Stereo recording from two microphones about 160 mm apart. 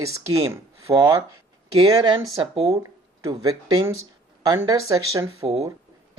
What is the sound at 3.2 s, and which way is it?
Speech, 20° right (ahead or behind).